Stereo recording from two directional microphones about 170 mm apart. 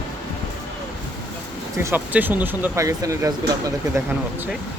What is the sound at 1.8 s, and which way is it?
Speech, 10° right (ahead or behind).